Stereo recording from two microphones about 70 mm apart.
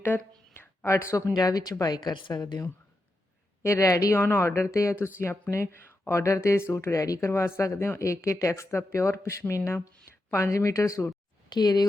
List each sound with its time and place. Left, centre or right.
0.0 s a sound: left
0.9 s a woman's voice: left
1.3 s speech: left
1.8 s a woman's voice: left
3.6 s a woman's voice: left
4.2 s speech: left
7.3 s a woman's voice: left
11.5 s speech: left